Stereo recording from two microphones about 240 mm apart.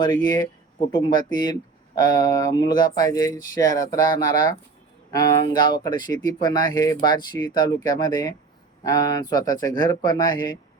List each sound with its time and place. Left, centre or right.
0.9 s speech: centre